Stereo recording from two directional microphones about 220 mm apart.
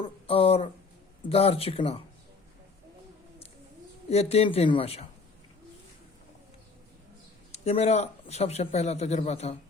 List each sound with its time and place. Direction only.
0.0 s a man's voice: 25° left (ahead or behind)
4.1 s a man's voice: 30° left (ahead or behind)
7.5 s a man's voice: 30° left (ahead or behind)